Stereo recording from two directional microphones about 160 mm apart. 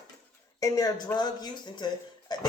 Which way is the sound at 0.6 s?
20° left (ahead or behind).